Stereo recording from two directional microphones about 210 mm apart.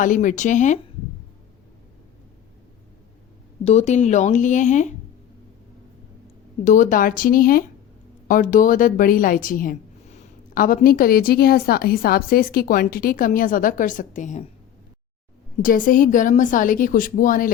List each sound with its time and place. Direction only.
0.0 s a woman's voice: 40° left (ahead or behind)
3.6 s a woman's voice: 30° left (ahead or behind)
6.7 s a woman's voice: 35° left (ahead or behind)
15.6 s a woman's voice: 40° left (ahead or behind)